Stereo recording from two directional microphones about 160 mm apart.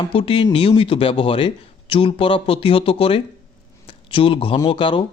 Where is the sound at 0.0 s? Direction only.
35° left (ahead or behind).